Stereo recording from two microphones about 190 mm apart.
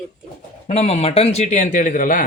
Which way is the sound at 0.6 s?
35° left (ahead or behind).